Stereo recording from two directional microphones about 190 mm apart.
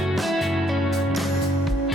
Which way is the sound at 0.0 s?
Centre (ahead or behind).